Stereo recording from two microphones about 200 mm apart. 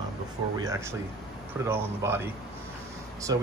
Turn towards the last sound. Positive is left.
turn(degrees=-20)  # may be behind; listen again after turning